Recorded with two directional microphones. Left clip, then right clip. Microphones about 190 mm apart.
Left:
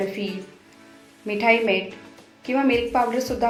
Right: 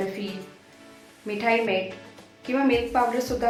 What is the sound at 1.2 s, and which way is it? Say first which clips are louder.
A woman's voice: left 4 dB; 20° left (ahead or behind).